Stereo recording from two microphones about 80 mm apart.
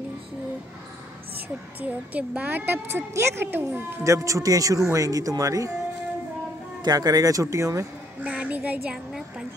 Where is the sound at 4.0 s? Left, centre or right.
Right.